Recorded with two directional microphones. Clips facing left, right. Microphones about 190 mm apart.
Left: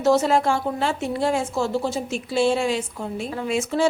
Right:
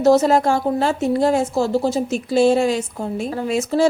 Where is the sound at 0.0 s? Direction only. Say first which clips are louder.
Right 4 dB; 40° right (ahead or behind).